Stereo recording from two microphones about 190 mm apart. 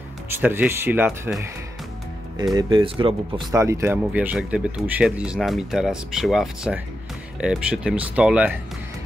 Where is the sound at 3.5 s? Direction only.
15° right (ahead or behind).